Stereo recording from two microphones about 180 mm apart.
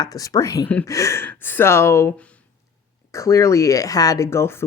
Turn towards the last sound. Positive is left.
turn(degrees=15)  # may be behind; listen again after turning